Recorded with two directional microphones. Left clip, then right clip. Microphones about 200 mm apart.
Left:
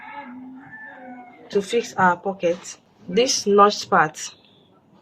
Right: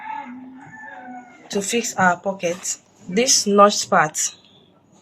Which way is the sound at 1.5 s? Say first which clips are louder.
Left 1 dB; 20° left (ahead or behind).